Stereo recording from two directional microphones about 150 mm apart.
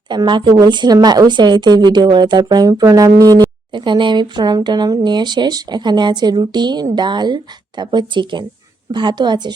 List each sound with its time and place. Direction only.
0.1 s speech: 30° right (ahead or behind)